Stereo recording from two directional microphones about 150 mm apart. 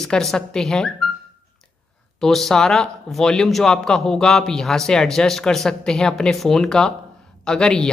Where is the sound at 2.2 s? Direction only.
5° left (ahead or behind).